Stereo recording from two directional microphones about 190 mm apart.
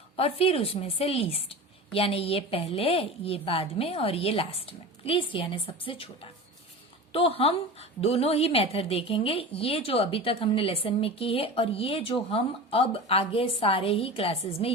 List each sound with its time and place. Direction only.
0.2 s a woman's voice: 30° left (ahead or behind)
7.1 s a woman's voice: 30° left (ahead or behind)